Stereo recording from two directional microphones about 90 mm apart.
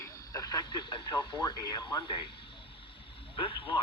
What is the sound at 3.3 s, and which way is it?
Speech, 90° left.